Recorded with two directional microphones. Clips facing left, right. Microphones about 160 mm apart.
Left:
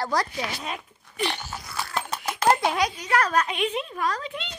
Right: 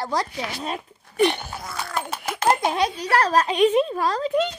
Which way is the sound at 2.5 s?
25° right (ahead or behind).